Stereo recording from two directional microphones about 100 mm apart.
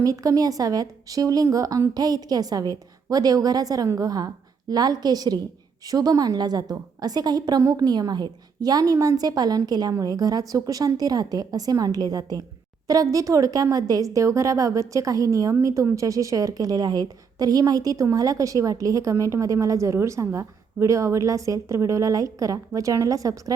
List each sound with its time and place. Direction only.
0.0 s speech: 35° right (ahead or behind)